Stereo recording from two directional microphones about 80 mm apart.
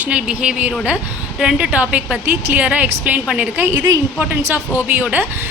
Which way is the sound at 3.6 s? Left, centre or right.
Right.